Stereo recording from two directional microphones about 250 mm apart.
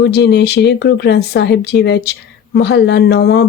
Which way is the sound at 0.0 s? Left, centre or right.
Left.